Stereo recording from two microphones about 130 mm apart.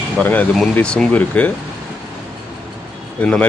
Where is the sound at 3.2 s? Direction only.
10° left (ahead or behind).